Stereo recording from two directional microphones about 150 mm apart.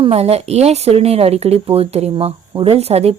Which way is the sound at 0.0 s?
40° right (ahead or behind).